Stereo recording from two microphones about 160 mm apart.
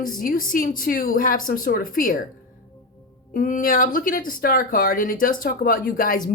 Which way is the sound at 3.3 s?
55° left (ahead or behind).